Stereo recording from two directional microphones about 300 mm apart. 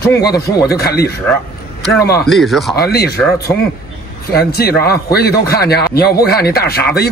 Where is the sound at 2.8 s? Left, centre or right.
Left.